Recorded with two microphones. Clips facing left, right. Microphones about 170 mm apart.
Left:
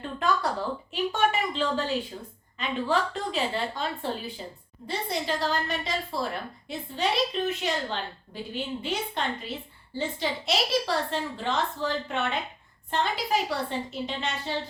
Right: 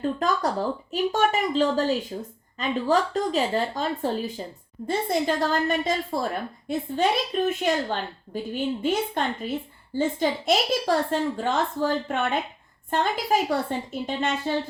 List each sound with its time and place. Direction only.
0.2 s a woman's voice: 40° right (ahead or behind)